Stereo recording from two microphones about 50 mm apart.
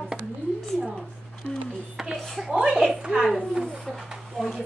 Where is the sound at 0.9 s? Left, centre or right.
Centre.